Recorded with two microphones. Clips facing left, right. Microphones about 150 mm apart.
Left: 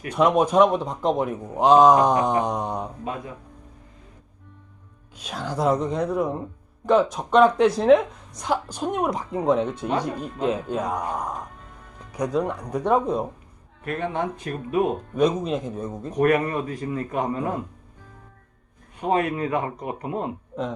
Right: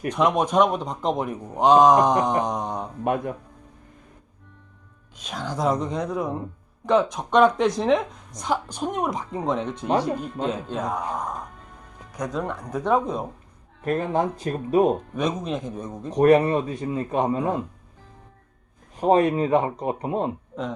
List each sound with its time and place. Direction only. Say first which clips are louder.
0.1 s a woman's voice: left 2 dB; 5° left (ahead or behind)
3.0 s speech: right 7 dB; 65° right (ahead or behind)
5.2 s a woman's voice: left 1 dB; 5° left (ahead or behind)
13.8 s speech: right 3 dB; 40° right (ahead or behind)
15.1 s a woman's voice: left 4 dB; 5° left (ahead or behind)
16.1 s speech: right 4 dB; 30° right (ahead or behind)
18.9 s speech: right 4 dB; 35° right (ahead or behind)